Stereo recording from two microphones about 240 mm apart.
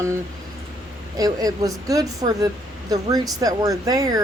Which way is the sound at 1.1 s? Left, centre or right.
Centre.